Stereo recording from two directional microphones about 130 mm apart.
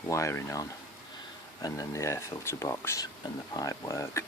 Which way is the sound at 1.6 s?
25° left (ahead or behind).